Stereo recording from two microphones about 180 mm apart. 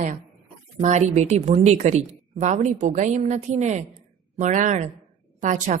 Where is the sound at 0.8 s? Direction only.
40° right (ahead or behind).